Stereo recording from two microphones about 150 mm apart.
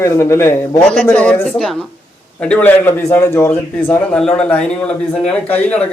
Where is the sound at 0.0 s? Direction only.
15° left (ahead or behind).